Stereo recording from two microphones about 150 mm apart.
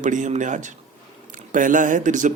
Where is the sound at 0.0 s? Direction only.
55° right (ahead or behind).